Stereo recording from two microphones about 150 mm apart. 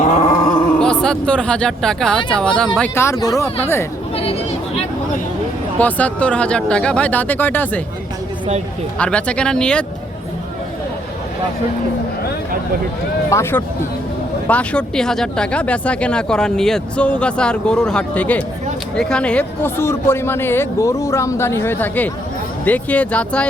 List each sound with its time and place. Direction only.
0.3 s a sound: 40° left (ahead or behind)
0.8 s speech: 5° left (ahead or behind)
2.9 s speech: 20° left (ahead or behind)
4.1 s chatter: 40° left (ahead or behind)
5.8 s speech: 10° left (ahead or behind)
9.0 s speech: 10° left (ahead or behind)
13.3 s speech: 15° left (ahead or behind)